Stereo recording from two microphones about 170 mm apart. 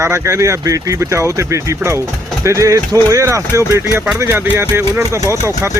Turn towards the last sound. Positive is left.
turn(degrees=-15)  # may be behind; listen again after turning